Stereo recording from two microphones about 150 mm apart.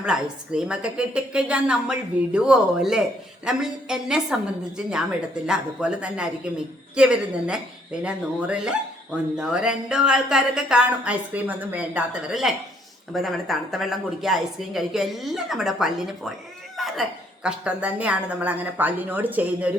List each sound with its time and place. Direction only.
0.0 s a woman's voice: 5° right (ahead or behind)
5.5 s a woman's voice: 5° right (ahead or behind)